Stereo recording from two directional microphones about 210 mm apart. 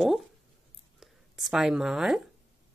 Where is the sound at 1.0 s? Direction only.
Centre (ahead or behind).